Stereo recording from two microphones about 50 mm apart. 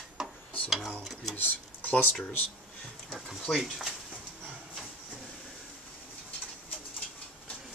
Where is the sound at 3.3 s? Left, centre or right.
Centre.